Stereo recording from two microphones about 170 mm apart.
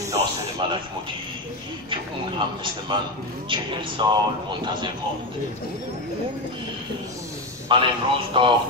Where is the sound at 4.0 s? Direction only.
30° right (ahead or behind).